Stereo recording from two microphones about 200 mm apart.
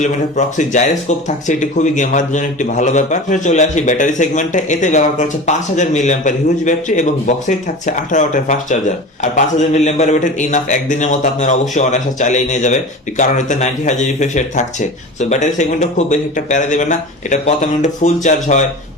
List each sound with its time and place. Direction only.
0.0 s a man's voice: 35° left (ahead or behind)